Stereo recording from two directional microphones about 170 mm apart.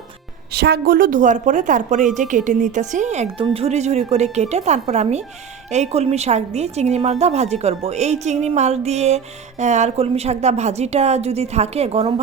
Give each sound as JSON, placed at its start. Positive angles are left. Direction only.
{"t": 0.5, "sound": "a woman's voice", "side_deg": -70}